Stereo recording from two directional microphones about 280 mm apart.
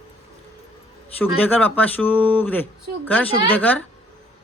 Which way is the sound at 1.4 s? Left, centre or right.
Centre.